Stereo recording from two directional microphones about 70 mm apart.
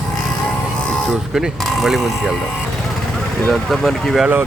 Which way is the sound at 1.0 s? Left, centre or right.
Centre.